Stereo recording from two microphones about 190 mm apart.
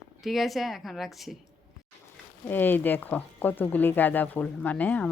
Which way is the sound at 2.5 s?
10° left (ahead or behind).